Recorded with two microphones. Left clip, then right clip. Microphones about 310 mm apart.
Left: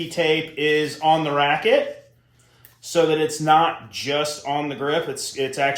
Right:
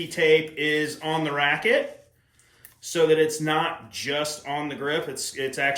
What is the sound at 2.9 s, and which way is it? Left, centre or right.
Speech, centre.